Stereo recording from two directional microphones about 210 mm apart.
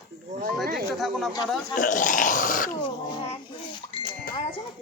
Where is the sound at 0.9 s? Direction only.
Centre (ahead or behind).